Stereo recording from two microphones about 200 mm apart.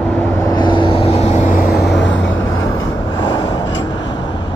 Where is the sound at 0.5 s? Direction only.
20° left (ahead or behind).